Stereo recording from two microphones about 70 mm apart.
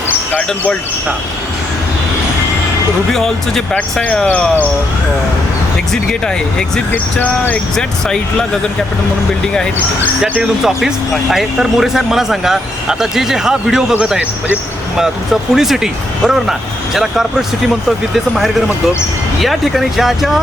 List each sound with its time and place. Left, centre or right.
3.1 s speech: centre
5.9 s speech: centre
6.9 s speech: left
7.8 s speech: centre
10.4 s speech: centre
14.9 s speech: centre